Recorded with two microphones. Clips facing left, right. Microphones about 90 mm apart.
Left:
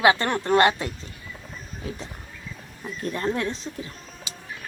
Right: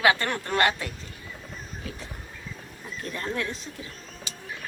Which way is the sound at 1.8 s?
30° left (ahead or behind).